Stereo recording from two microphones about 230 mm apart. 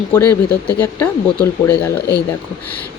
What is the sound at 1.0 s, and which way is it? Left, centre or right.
Speech, centre.